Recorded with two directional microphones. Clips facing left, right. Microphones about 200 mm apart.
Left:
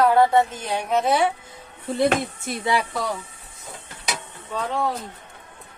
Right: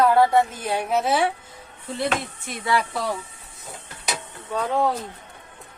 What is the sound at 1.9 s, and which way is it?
Speech, 45° left (ahead or behind).